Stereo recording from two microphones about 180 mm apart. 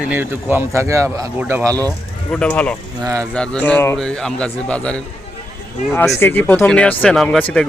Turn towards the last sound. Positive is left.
turn(degrees=5)  # may be behind; listen again after turning